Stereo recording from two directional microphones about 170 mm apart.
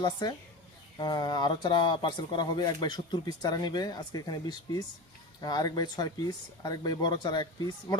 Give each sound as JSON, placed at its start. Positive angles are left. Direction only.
{"t": 0.0, "sound": "speech", "side_deg": 25}